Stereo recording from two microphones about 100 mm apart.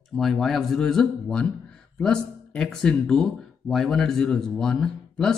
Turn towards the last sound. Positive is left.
turn(degrees=5)  # may be behind; listen again after turning